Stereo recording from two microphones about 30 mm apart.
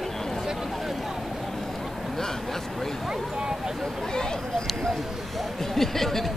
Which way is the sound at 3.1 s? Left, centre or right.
Right.